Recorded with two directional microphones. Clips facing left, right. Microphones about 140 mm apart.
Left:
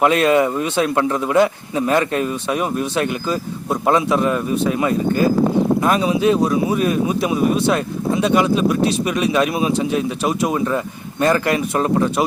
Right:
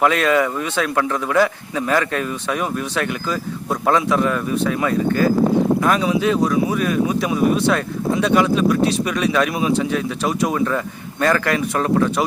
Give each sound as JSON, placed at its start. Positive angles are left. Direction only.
{"t": 0.0, "sound": "speech", "side_deg": 25}